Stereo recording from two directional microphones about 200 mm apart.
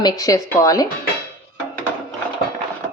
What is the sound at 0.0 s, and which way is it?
Speech, 15° left (ahead or behind).